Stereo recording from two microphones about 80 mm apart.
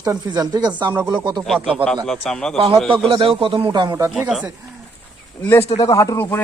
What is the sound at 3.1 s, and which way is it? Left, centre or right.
Speech, right.